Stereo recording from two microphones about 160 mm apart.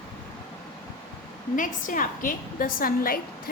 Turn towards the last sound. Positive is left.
turn(degrees=65)  # may be behind; listen again after turning